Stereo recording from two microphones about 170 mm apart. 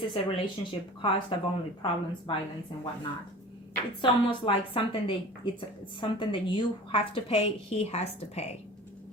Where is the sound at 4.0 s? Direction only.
30° left (ahead or behind).